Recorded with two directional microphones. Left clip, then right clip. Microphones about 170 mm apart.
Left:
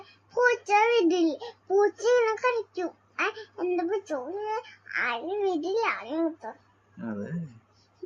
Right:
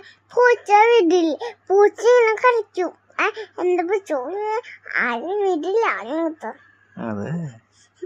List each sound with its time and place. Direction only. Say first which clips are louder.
0.3 s a child's voice: right 8 dB; 35° right (ahead or behind)
7.0 s speech: right 8 dB; 60° right (ahead or behind)